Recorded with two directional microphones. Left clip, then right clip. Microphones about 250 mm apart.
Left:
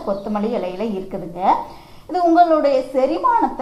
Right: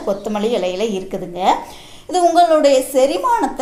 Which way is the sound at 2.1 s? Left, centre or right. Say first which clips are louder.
Right 2 dB; right.